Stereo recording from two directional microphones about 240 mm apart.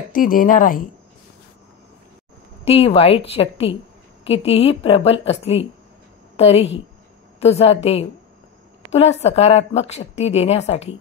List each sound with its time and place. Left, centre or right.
0.1 s speech: left
2.6 s a woman's voice: left